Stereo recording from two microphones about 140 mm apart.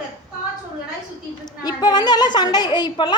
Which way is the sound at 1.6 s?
30° left (ahead or behind).